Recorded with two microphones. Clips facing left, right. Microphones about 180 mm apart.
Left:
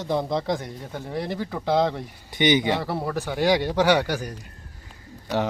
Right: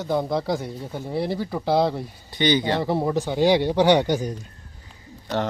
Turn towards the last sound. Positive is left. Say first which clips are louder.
# even
turn(degrees=10)  # may be behind; listen again after turning